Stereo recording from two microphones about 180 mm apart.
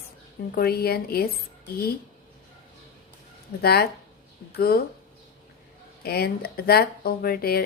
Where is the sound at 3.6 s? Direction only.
60° left (ahead or behind).